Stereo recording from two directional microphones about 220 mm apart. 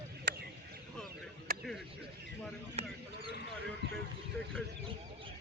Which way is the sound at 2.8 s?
30° right (ahead or behind).